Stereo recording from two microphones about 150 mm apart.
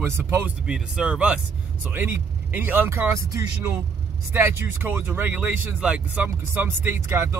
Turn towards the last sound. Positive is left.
turn(degrees=-15)  # may be behind; listen again after turning